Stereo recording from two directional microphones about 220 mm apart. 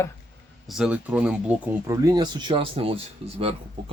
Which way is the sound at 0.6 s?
5° right (ahead or behind).